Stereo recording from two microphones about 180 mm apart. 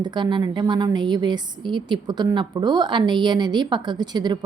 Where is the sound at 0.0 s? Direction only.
25° right (ahead or behind).